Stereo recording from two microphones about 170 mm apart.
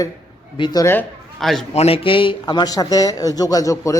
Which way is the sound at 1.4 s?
Centre (ahead or behind).